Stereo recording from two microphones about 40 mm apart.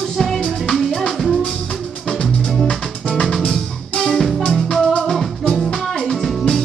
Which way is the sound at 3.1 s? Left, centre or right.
Centre.